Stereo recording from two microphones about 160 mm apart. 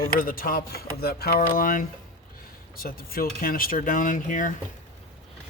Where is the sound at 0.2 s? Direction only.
65° left (ahead or behind).